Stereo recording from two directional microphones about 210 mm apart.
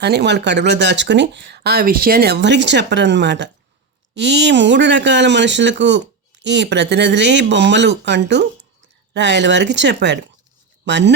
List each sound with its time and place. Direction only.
0.0 s speech: 55° right (ahead or behind)